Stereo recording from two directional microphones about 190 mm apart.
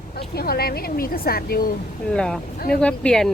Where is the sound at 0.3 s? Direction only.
55° left (ahead or behind).